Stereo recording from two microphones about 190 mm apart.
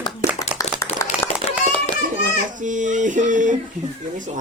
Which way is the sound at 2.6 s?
40° right (ahead or behind).